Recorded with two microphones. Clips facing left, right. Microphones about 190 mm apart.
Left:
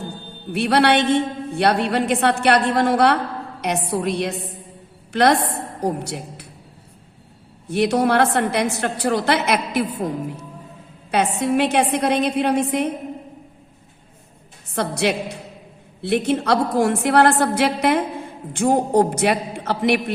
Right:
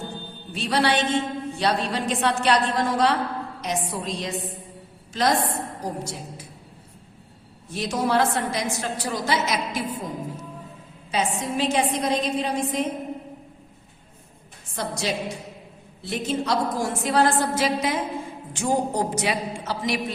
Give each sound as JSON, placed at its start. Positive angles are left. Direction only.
{"t": 0.5, "sound": "a woman's voice", "side_deg": 60}
{"t": 7.7, "sound": "a woman's voice", "side_deg": 65}
{"t": 14.8, "sound": "a woman's voice", "side_deg": 65}